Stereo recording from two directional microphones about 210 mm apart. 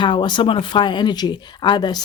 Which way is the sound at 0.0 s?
20° left (ahead or behind).